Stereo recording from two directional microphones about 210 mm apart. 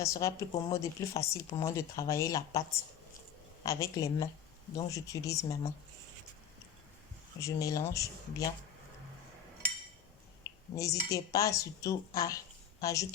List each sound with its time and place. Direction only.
0.0 s a woman's voice: 15° left (ahead or behind)
7.4 s a woman's voice: 15° left (ahead or behind)
10.8 s a woman's voice: 15° left (ahead or behind)